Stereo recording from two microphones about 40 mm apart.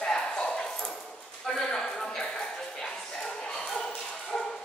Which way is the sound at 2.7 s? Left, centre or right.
Centre.